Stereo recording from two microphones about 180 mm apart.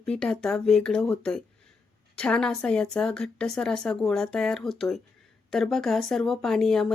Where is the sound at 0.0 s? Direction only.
5° left (ahead or behind).